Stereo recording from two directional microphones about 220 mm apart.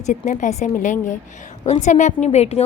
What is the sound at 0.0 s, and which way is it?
A woman's voice, 35° left (ahead or behind).